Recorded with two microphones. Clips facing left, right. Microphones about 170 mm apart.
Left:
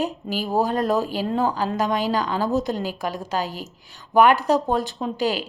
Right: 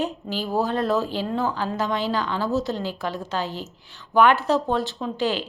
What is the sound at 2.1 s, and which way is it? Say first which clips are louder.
Speech: left 2 dB; 40° left (ahead or behind).